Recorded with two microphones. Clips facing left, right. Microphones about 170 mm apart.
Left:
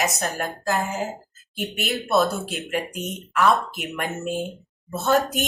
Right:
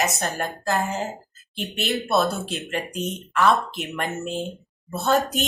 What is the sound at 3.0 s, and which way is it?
Speech, 20° left (ahead or behind).